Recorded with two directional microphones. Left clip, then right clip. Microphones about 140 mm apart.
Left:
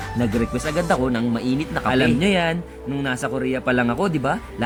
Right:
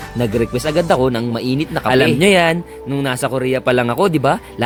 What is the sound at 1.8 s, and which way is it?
Speech, 55° right (ahead or behind).